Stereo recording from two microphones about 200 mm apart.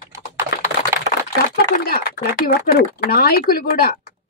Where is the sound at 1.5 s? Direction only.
50° left (ahead or behind).